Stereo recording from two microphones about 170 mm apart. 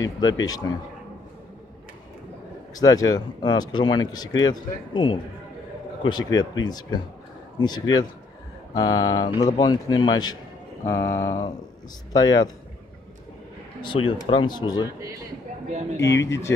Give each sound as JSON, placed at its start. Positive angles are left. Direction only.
{"t": 0.0, "sound": "speech", "side_deg": 25}
{"t": 2.7, "sound": "speech", "side_deg": 20}
{"t": 10.9, "sound": "a sound", "side_deg": 15}
{"t": 12.1, "sound": "speech", "side_deg": 25}
{"t": 13.8, "sound": "speech", "side_deg": 30}
{"t": 15.0, "sound": "a man's voice", "side_deg": -20}
{"t": 16.1, "sound": "speech", "side_deg": 90}